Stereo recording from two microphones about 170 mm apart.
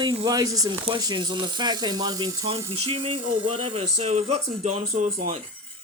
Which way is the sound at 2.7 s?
35° right (ahead or behind).